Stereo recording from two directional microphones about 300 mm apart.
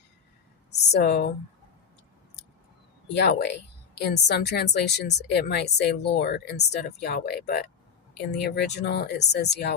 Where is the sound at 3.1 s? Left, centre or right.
Left.